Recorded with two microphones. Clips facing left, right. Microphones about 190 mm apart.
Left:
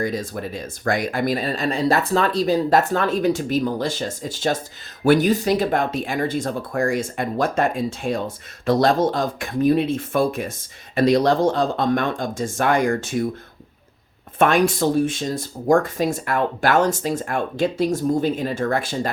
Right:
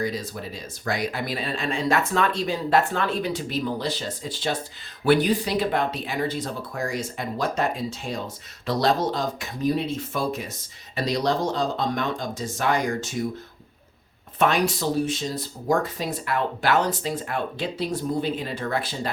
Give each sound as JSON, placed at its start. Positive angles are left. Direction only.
{"t": 0.0, "sound": "speech", "side_deg": 50}
{"t": 14.3, "sound": "speech", "side_deg": 50}